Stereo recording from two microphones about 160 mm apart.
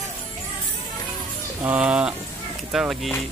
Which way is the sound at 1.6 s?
5° right (ahead or behind).